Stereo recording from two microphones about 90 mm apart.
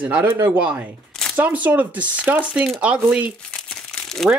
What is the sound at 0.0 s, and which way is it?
Speech, 15° right (ahead or behind).